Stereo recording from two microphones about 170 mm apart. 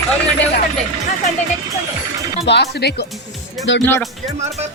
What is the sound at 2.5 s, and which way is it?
Speech, 80° left.